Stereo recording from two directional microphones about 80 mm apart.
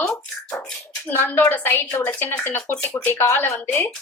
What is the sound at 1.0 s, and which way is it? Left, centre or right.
A woman's voice, left.